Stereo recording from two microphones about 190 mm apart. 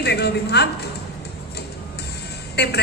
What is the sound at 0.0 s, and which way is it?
Speech, 60° left (ahead or behind).